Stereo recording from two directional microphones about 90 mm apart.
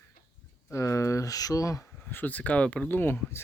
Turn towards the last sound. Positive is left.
turn(degrees=25)  # may be behind; listen again after turning